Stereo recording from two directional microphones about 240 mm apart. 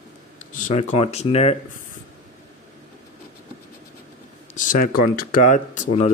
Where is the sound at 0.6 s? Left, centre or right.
Left.